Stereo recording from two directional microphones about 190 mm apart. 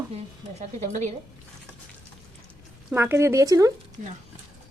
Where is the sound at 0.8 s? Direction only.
40° right (ahead or behind).